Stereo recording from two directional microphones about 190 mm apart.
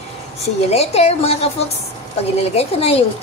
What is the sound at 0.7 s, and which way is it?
Speech, 35° left (ahead or behind).